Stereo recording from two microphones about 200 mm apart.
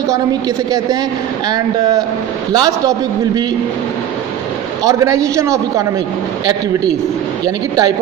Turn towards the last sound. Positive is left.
turn(degrees=-20)  # may be behind; listen again after turning